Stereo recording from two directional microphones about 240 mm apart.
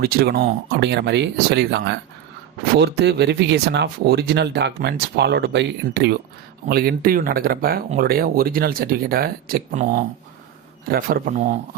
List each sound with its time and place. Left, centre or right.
0.0 s speech: right